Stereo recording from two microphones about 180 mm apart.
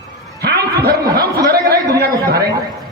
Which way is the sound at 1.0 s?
20° right (ahead or behind).